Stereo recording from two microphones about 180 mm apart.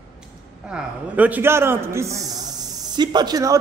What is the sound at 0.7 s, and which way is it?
A man's voice, 10° right (ahead or behind).